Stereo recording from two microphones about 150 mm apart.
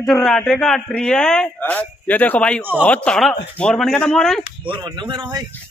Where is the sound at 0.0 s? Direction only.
Centre (ahead or behind).